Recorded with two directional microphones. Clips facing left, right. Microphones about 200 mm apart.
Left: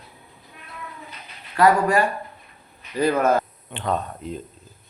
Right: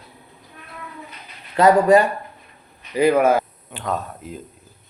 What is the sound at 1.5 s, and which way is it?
A man's voice, 20° right (ahead or behind).